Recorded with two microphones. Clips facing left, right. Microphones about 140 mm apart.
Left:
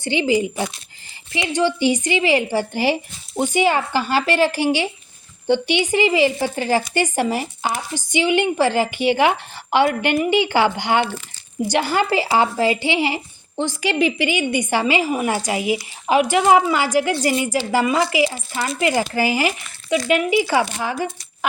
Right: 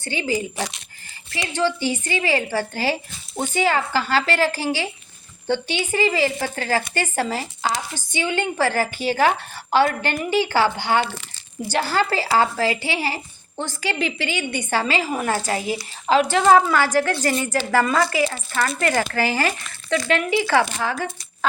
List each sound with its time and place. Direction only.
0.0 s a woman's voice: 20° left (ahead or behind)